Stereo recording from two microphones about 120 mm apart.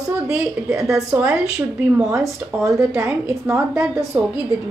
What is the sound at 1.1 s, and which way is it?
Speech, 15° right (ahead or behind).